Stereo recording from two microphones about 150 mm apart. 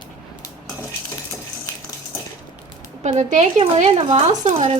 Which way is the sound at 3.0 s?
50° right (ahead or behind).